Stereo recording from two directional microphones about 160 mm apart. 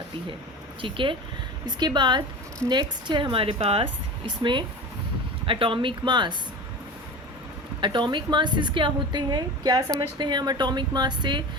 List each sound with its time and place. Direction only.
0.8 s a woman's voice: 30° right (ahead or behind)
7.8 s a woman's voice: 30° right (ahead or behind)